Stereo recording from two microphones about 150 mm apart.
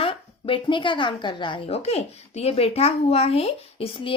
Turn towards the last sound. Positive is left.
turn(degrees=35)  # may be behind; listen again after turning